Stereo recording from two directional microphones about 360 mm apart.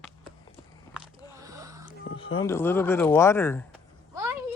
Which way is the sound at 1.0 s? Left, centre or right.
Centre.